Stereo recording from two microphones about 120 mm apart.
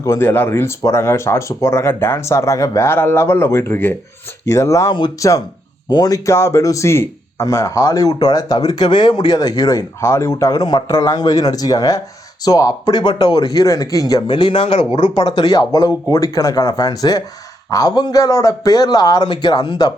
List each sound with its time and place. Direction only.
0.2 s a man's voice: 20° left (ahead or behind); by 14.5 s 40° left (ahead or behind)
14.5 s speech: 50° left (ahead or behind)
14.9 s a man's voice: 40° left (ahead or behind)